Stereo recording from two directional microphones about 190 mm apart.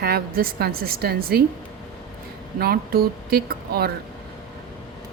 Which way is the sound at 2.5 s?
50° right (ahead or behind).